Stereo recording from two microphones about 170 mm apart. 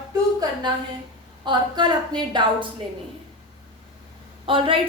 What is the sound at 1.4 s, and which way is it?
A woman's voice, 25° right (ahead or behind).